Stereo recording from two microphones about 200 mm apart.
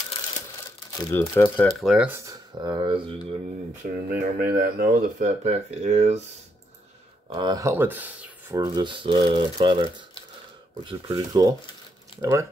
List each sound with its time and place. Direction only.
0.7 s speech: 15° left (ahead or behind)
1.9 s speech: 5° right (ahead or behind); by 3.3 s 25° right (ahead or behind)
4.1 s speech: 45° right (ahead or behind)
5.4 s speech: 30° right (ahead or behind)
7.2 s speech: 20° right (ahead or behind)